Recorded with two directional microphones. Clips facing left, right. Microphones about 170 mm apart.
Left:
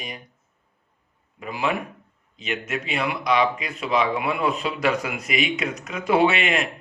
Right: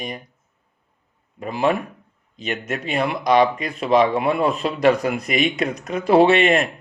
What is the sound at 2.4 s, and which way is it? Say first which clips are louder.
A man's voice: right 2 dB; 40° right (ahead or behind).